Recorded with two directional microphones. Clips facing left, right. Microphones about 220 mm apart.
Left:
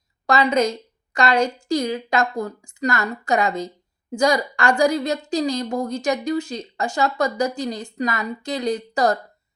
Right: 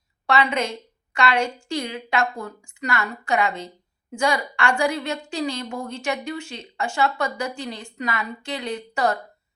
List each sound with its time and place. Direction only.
0.3 s a woman's voice: 40° left (ahead or behind)